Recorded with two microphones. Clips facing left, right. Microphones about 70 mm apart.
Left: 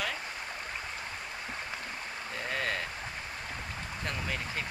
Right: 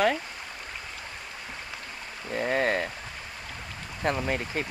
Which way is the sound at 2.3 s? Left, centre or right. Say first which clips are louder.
Right 9 dB; right.